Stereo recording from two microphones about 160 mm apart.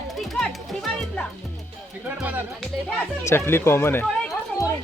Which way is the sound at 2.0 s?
10° right (ahead or behind).